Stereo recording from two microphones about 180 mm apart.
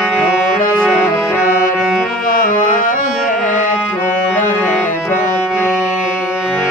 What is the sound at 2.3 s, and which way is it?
Music, 50° left (ahead or behind).